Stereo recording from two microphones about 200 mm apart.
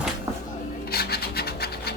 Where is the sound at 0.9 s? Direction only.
50° left (ahead or behind).